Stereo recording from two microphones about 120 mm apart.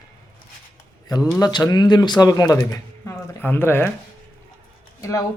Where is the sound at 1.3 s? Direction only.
30° left (ahead or behind).